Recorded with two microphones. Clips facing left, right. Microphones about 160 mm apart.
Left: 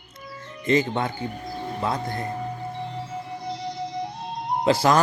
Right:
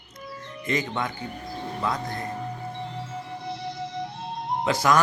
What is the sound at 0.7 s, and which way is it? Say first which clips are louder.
Speech: left 6 dB; 30° left (ahead or behind).